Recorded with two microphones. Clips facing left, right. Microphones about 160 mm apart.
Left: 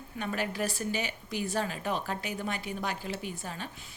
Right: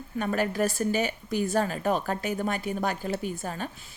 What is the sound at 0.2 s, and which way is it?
A woman's voice, 45° right (ahead or behind).